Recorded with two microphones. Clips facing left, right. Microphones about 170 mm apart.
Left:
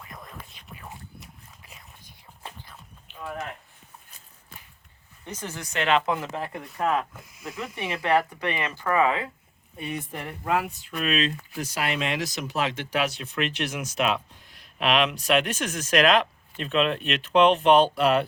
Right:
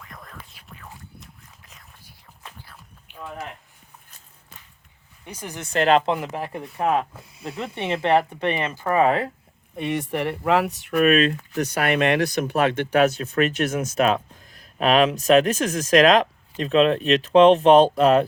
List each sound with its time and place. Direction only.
0.1 s whispering: centre (ahead or behind)
2.6 s a sound: 10° right (ahead or behind)
5.2 s speech: 10° right (ahead or behind)
5.7 s speech: 40° right (ahead or behind)
6.1 s speech: 15° right (ahead or behind)
6.9 s speech: 30° right (ahead or behind)
9.0 s speech: 45° right (ahead or behind)
9.7 s speech: 90° right; by 18.3 s 40° right (ahead or behind)